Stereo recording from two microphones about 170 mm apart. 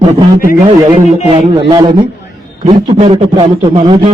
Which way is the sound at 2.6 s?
40° right (ahead or behind).